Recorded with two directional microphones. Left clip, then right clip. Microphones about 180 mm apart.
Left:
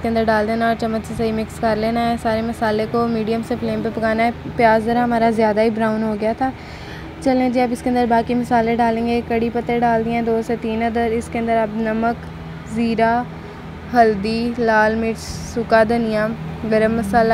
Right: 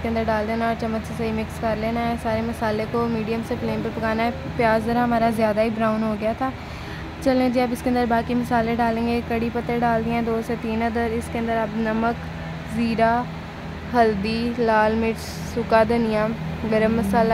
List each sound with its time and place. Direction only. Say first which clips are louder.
0.0 s a woman's voice: left 6 dB; 25° left (ahead or behind)